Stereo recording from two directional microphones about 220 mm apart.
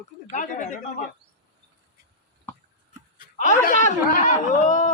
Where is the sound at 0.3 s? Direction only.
35° left (ahead or behind).